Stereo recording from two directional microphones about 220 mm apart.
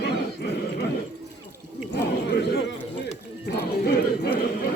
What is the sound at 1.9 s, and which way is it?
Chatter, 50° left (ahead or behind).